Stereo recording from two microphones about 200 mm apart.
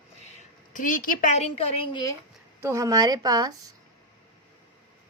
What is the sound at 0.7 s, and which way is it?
A woman's voice, 40° left (ahead or behind).